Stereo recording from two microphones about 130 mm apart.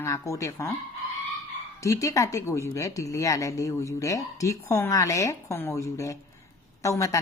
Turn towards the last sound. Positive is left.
turn(degrees=25)  # may be behind; listen again after turning